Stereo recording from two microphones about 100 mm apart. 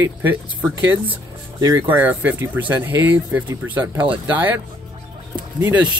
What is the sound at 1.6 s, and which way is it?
Speech, 35° right (ahead or behind).